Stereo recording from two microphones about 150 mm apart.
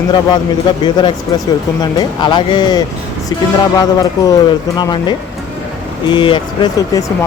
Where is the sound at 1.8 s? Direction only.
30° left (ahead or behind).